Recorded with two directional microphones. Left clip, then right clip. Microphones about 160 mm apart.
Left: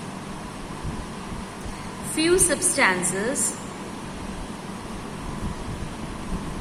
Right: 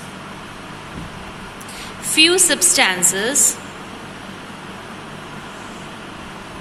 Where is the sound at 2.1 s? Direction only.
35° right (ahead or behind).